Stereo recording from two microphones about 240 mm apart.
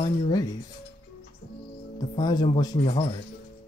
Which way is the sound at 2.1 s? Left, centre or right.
Centre.